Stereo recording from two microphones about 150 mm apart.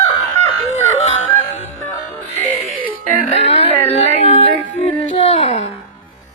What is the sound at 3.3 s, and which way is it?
Speech, 40° left (ahead or behind).